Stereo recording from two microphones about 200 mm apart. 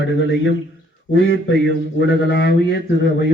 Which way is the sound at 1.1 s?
70° left (ahead or behind).